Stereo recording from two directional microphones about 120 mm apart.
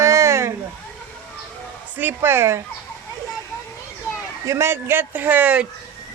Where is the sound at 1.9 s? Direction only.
15° right (ahead or behind).